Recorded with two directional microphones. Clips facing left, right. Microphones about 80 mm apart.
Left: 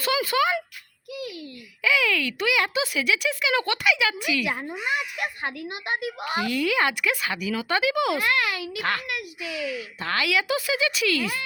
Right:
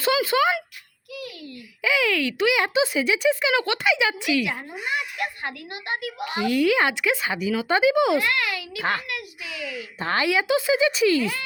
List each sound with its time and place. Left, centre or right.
0.0 s a sound: right
1.8 s speech: centre
3.5 s speech: centre
5.2 s a woman's voice: left
6.5 s speech: centre
8.2 s a woman's voice: left
10.0 s speech: right